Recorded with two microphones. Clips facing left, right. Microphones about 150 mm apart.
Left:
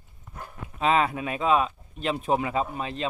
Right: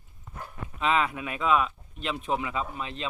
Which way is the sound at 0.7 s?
40° left (ahead or behind).